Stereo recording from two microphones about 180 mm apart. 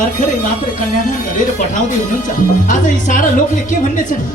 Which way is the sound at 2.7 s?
45° left (ahead or behind).